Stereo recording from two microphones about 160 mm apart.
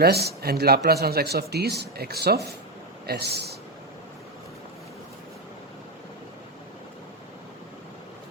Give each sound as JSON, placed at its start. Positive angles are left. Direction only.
{"t": 0.0, "sound": "speech", "side_deg": -85}